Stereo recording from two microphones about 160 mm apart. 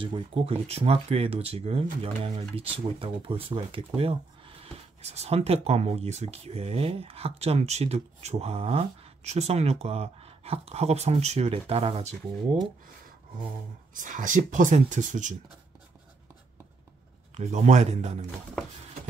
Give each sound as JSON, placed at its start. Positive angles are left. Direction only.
{"t": 0.0, "sound": "speech", "side_deg": -30}
{"t": 13.9, "sound": "speech", "side_deg": -55}
{"t": 17.3, "sound": "speech", "side_deg": -45}